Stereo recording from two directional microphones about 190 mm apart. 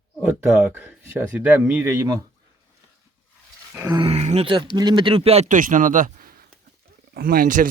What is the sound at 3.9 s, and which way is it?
A man's voice, 30° right (ahead or behind).